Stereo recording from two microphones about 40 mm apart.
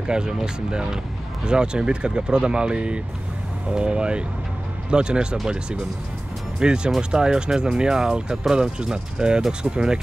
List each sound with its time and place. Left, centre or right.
0.0 s speech: centre
6.6 s speech: right